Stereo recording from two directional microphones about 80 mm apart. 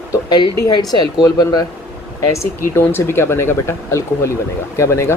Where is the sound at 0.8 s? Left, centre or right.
Left.